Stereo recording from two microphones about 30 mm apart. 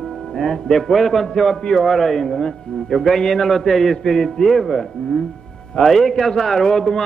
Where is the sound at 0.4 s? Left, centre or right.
Centre.